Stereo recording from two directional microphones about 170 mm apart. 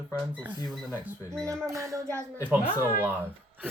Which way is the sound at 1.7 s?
20° right (ahead or behind).